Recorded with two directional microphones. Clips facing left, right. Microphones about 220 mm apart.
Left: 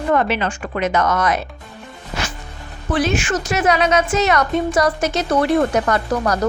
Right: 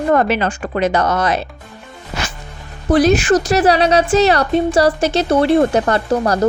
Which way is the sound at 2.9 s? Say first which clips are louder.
Right 7 dB; 40° right (ahead or behind).